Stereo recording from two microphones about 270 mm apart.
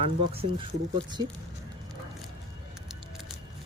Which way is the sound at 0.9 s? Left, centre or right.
Centre.